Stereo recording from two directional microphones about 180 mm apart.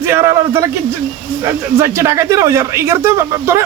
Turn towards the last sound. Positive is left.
turn(degrees=-15)  # may be behind; listen again after turning